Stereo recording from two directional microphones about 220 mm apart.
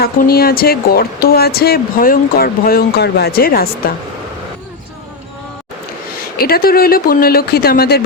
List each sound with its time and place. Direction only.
0.0 s speech: 45° left (ahead or behind)
6.3 s speech: 45° left (ahead or behind)